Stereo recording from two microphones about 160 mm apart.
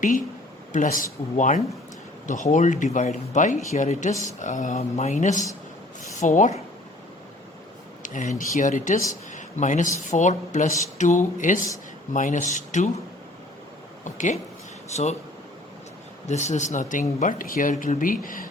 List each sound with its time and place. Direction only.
0.7 s speech: 55° left (ahead or behind)
8.0 s speech: 55° left (ahead or behind)
9.3 s a sound: 50° left (ahead or behind)
10.1 s speech: 50° left (ahead or behind)
14.0 s speech: 50° left (ahead or behind)
16.2 s speech: 45° left (ahead or behind)